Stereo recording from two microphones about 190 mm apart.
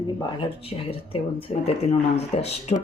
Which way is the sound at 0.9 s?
30° left (ahead or behind).